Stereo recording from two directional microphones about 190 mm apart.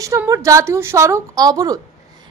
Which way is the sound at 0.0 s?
15° right (ahead or behind).